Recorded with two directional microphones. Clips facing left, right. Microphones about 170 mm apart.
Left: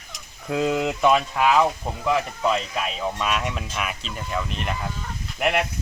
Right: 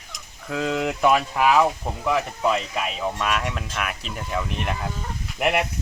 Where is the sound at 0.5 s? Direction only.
10° left (ahead or behind).